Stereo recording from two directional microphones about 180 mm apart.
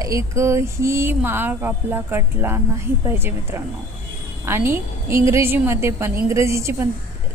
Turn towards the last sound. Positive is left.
turn(degrees=-15)  # may be behind; listen again after turning